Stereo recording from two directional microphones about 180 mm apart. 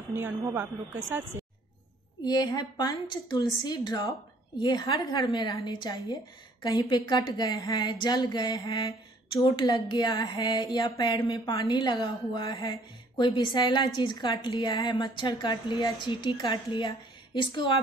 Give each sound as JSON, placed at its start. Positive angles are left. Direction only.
{"t": 0.1, "sound": "speech", "side_deg": -10}
{"t": 2.2, "sound": "a woman's voice", "side_deg": 20}